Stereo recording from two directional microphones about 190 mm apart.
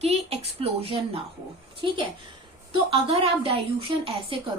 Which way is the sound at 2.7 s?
30° right (ahead or behind).